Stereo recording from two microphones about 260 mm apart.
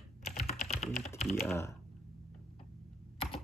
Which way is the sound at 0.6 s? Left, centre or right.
Left.